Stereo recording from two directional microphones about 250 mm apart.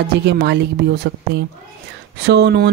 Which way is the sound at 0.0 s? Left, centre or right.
Right.